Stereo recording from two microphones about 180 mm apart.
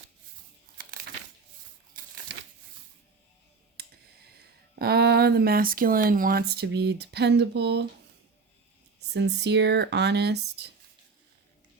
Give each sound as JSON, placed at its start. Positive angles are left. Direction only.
{"t": 0.8, "sound": "crumpling", "side_deg": -55}
{"t": 4.8, "sound": "speech", "side_deg": -60}
{"t": 9.0, "sound": "speech", "side_deg": -70}